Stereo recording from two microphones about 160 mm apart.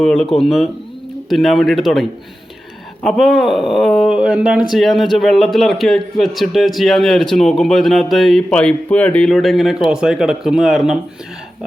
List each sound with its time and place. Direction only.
0.0 s speech: 5° left (ahead or behind)